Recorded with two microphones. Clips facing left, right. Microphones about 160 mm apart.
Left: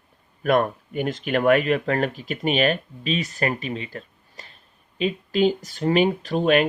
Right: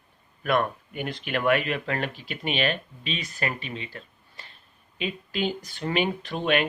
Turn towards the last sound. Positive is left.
turn(degrees=40)  # may be behind; listen again after turning